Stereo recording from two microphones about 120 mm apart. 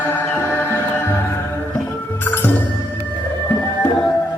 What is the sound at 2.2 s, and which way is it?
Music, 20° left (ahead or behind).